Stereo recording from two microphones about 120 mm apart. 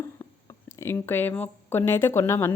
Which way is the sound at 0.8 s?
20° left (ahead or behind).